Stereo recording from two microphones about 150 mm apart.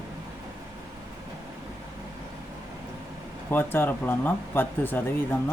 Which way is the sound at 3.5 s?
15° left (ahead or behind).